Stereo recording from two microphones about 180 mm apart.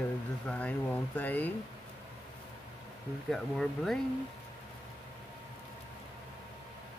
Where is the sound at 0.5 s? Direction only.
5° left (ahead or behind).